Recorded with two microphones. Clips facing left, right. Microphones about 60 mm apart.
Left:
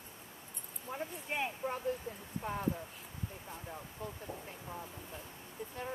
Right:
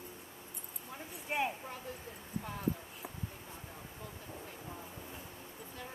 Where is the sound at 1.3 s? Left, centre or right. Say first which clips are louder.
Right 3 dB; centre.